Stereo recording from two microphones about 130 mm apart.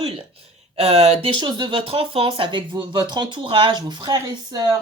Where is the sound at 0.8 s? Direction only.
50° right (ahead or behind).